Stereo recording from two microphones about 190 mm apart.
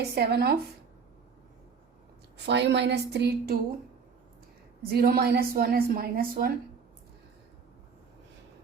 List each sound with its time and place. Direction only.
0.0 s a woman's voice: 60° right (ahead or behind)
2.5 s a woman's voice: 65° right (ahead or behind)
4.9 s a woman's voice: 55° right (ahead or behind)